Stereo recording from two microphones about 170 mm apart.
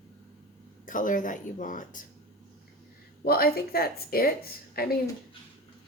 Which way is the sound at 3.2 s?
65° left (ahead or behind).